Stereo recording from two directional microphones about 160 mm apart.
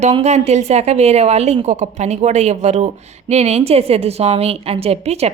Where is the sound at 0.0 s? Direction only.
45° right (ahead or behind).